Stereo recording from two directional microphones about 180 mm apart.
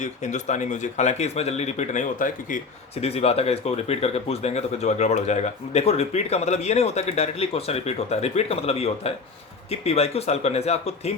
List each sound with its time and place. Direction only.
0.0 s speech: 40° left (ahead or behind)
3.0 s speech: 35° left (ahead or behind)